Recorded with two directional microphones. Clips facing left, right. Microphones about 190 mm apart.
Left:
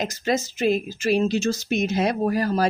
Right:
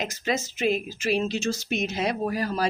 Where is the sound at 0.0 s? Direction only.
40° left (ahead or behind).